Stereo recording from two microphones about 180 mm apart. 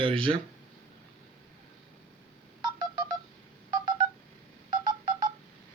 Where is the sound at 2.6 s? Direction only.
20° right (ahead or behind).